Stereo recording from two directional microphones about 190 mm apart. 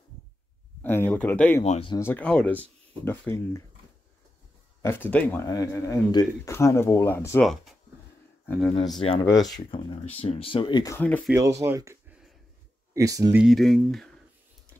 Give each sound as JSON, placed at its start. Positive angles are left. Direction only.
{"t": 0.8, "sound": "speech", "side_deg": 10}
{"t": 1.6, "sound": "speech", "side_deg": 30}
{"t": 2.0, "sound": "speech", "side_deg": 10}
{"t": 4.8, "sound": "speech", "side_deg": 10}
{"t": 8.5, "sound": "speech", "side_deg": 5}
{"t": 9.2, "sound": "speech", "side_deg": 20}
{"t": 11.0, "sound": "speech", "side_deg": 10}
{"t": 11.3, "sound": "speech", "side_deg": -15}
{"t": 13.4, "sound": "speech", "side_deg": 0}